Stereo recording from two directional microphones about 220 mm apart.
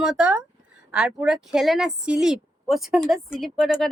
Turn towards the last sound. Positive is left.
turn(degrees=0)  # may be behind; listen again after turning